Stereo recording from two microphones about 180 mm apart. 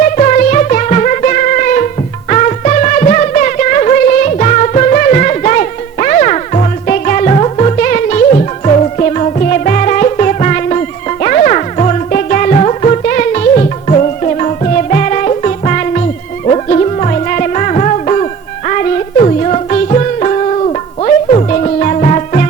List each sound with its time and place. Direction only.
0.0 s music: 45° left (ahead or behind)